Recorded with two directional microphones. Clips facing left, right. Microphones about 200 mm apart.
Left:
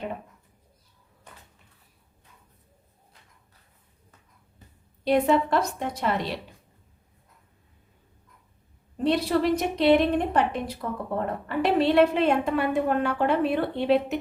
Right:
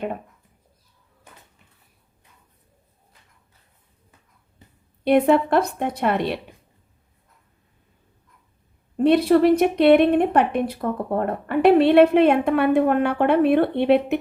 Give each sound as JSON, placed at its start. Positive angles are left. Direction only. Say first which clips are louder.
{"t": 5.0, "sound": "a woman's voice", "louder": "right 5 dB", "side_deg": -60}
{"t": 9.0, "sound": "a woman's voice", "louder": "right 7 dB", "side_deg": -55}